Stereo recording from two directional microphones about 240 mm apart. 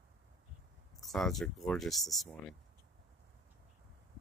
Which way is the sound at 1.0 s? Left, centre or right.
Centre.